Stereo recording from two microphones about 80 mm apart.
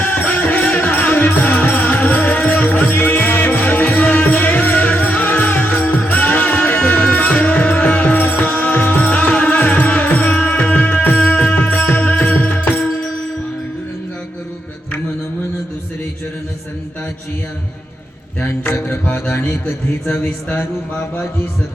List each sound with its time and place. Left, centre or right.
0.0 s music: left
18.9 s music: left
20.1 s mantra: left